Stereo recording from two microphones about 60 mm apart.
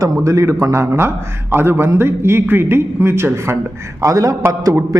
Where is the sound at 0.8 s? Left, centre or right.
Right.